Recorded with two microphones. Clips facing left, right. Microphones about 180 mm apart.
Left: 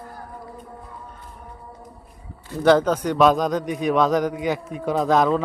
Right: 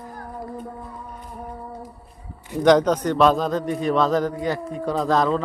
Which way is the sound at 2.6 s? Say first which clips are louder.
Right 1 dB; 5° left (ahead or behind).